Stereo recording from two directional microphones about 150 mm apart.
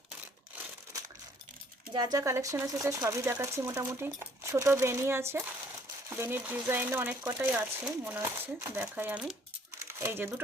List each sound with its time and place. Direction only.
1.9 s speech: 25° right (ahead or behind); by 9.2 s 10° right (ahead or behind)
9.7 s coin: 15° right (ahead or behind)